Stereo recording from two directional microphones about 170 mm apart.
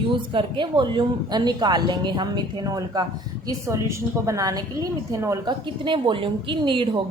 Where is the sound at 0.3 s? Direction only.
30° right (ahead or behind).